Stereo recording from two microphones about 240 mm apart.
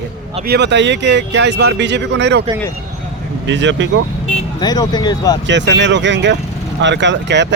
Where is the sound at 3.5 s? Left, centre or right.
Right.